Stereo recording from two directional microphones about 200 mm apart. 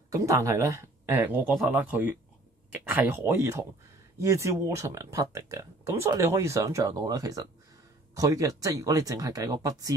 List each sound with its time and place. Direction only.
0.1 s speech: 15° right (ahead or behind)